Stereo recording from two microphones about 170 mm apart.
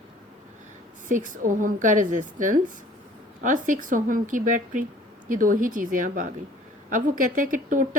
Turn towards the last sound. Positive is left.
turn(degrees=-55)  # may be behind; listen again after turning